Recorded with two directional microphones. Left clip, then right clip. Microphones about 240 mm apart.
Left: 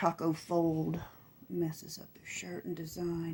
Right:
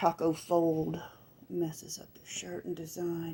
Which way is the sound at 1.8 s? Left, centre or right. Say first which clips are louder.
Right 3 dB; left.